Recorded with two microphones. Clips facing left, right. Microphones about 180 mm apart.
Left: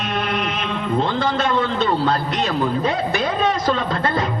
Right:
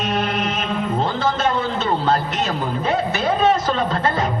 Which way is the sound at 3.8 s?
40° right (ahead or behind).